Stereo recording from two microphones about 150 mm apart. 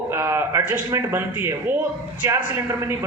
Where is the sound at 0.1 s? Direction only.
15° right (ahead or behind).